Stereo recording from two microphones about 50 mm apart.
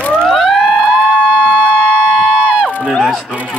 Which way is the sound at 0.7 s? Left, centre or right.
Centre.